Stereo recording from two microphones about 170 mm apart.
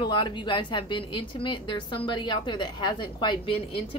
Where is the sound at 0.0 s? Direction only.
25° left (ahead or behind).